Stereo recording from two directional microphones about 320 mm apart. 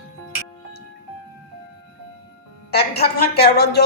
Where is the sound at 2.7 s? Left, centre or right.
Left.